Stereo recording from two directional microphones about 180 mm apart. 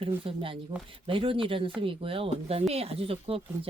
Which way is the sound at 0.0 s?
30° right (ahead or behind).